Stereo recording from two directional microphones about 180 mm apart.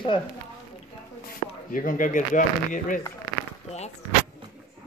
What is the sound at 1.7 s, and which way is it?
Speech, 50° left (ahead or behind).